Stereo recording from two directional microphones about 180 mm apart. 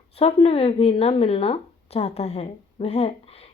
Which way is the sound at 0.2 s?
35° left (ahead or behind).